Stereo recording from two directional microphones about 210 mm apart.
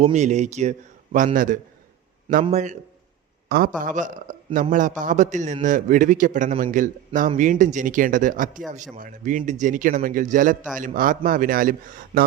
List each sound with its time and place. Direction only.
0.0 s a man's voice: 35° right (ahead or behind)
3.8 s a man's voice: 40° right (ahead or behind)